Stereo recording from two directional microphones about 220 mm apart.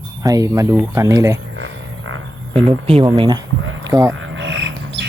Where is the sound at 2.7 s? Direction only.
25° right (ahead or behind).